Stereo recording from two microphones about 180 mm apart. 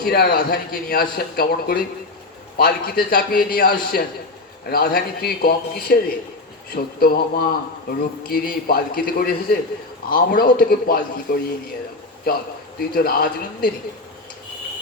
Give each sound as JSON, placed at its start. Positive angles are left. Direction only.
{"t": 0.0, "sound": "a man's voice", "side_deg": 60}
{"t": 12.9, "sound": "a man's voice", "side_deg": 55}